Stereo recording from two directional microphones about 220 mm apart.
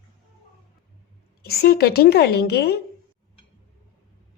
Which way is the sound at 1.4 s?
45° left (ahead or behind).